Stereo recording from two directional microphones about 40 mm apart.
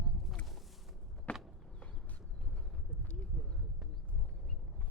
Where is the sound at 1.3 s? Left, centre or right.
Left.